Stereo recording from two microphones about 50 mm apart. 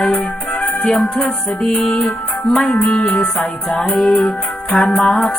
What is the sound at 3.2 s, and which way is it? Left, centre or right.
Music, centre.